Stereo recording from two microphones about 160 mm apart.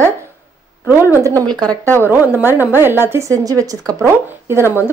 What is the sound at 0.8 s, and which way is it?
Speech, 15° right (ahead or behind).